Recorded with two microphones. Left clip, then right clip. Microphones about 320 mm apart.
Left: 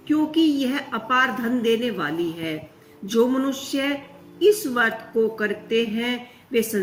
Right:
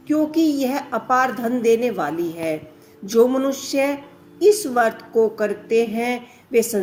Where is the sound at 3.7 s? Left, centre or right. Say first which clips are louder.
Right 5 dB; right.